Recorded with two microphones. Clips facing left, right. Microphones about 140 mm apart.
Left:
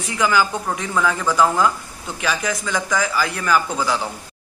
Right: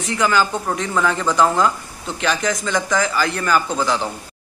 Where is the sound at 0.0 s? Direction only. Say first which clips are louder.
Right 1 dB; 10° left (ahead or behind).